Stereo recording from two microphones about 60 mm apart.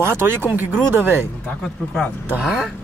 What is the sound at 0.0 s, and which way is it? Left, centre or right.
Speech, right.